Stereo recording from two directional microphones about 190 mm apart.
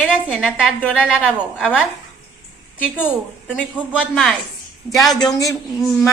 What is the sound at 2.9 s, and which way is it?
A woman's voice, 10° left (ahead or behind).